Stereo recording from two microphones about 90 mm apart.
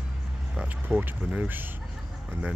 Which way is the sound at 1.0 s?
20° right (ahead or behind).